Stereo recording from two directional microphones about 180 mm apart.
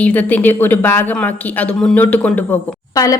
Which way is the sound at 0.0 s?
10° left (ahead or behind).